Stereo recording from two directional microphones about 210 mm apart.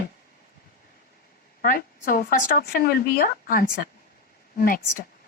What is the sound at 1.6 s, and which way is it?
A woman's voice, 40° left (ahead or behind).